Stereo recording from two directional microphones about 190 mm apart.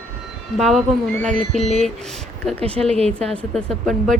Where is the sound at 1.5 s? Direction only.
35° left (ahead or behind).